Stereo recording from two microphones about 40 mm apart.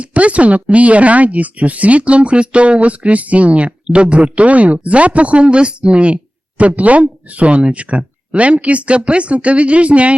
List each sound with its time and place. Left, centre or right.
0.0 s speech: right